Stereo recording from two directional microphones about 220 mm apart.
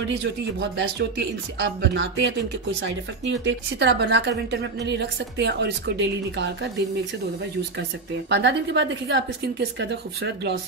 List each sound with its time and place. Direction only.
0.0 s a woman's voice: 55° right (ahead or behind)
8.3 s a woman's voice: 50° right (ahead or behind)